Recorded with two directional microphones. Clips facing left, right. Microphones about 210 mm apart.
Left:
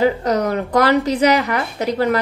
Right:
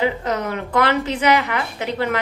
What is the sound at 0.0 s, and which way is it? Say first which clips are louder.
A woman's voice: left 5 dB; 40° left (ahead or behind).